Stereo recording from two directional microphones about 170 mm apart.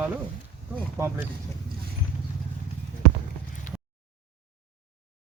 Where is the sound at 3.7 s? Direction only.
45° left (ahead or behind).